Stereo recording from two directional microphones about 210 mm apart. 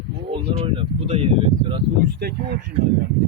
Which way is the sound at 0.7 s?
30° right (ahead or behind).